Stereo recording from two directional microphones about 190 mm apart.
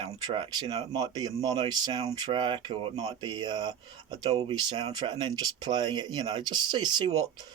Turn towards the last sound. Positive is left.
turn(degrees=-25)  # may be behind; listen again after turning